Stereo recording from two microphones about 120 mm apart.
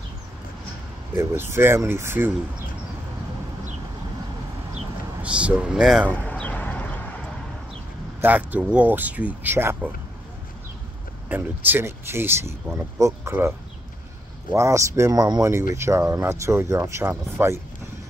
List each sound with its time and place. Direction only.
1.1 s speech: 20° right (ahead or behind)
5.2 s speech: 10° right (ahead or behind)
6.0 s a sound: 10° left (ahead or behind)
8.2 s speech: 15° right (ahead or behind)
11.2 s speech: 15° right (ahead or behind)
14.5 s speech: 25° right (ahead or behind)
15.5 s speech: 25° right (ahead or behind)